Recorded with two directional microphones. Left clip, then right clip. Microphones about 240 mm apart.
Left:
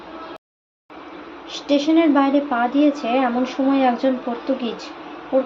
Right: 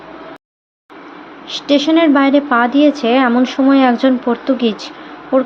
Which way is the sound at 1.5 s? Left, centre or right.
Right.